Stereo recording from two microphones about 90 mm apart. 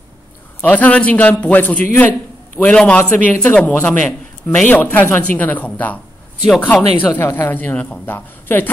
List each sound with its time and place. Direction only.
0.6 s a man's voice: 15° left (ahead or behind)